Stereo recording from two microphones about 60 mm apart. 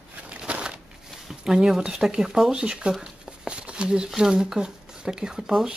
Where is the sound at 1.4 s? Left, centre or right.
Centre.